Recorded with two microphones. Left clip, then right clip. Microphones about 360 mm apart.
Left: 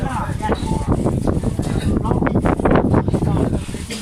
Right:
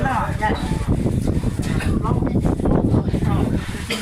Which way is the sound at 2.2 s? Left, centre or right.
Left.